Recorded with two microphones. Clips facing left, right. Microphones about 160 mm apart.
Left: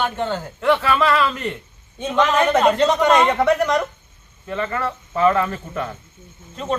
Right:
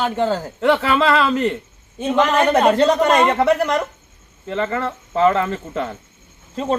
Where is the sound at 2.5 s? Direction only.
35° right (ahead or behind).